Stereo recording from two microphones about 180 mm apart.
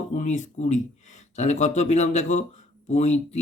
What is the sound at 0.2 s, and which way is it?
Speech, 40° left (ahead or behind).